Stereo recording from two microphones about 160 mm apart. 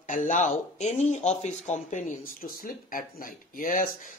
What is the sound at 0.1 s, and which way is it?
Speech, 50° left (ahead or behind).